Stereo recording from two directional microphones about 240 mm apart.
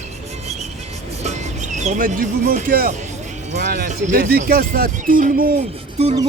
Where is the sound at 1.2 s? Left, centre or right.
Right.